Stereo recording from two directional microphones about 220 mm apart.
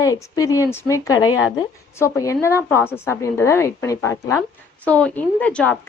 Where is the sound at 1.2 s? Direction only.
70° left (ahead or behind).